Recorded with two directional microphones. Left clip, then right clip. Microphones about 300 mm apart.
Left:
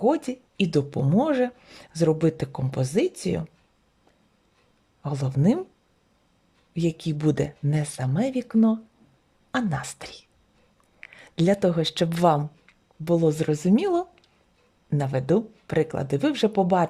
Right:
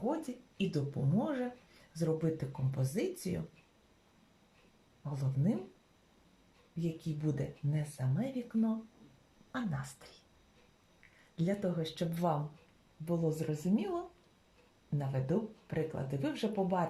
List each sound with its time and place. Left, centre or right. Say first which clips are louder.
0.1 s speech: left 13 dB; left
5.0 s speech: left 13 dB; left
6.7 s speech: left 13 dB; left
11.3 s speech: left 14 dB; left